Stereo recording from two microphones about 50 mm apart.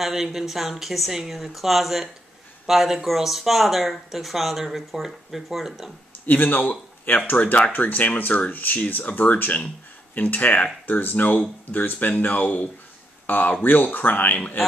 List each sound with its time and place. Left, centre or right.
0.0 s speech: centre
6.2 s speech: left